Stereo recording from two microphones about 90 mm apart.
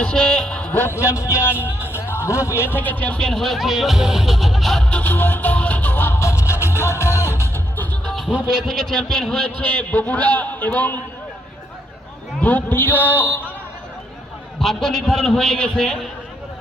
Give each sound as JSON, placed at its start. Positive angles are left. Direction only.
{"t": 0.0, "sound": "a sound", "side_deg": 10}
{"t": 0.7, "sound": "a man's voice", "side_deg": 25}
{"t": 8.0, "sound": "music", "side_deg": 0}
{"t": 8.3, "sound": "a man's voice", "side_deg": -10}
{"t": 8.6, "sound": "a man's voice", "side_deg": 0}
{"t": 9.6, "sound": "a man's voice", "side_deg": 20}
{"t": 12.4, "sound": "a man's voice", "side_deg": 20}
{"t": 14.6, "sound": "a man's voice", "side_deg": 5}